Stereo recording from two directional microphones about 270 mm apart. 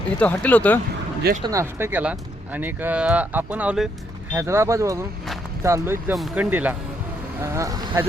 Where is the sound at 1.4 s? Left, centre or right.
Centre.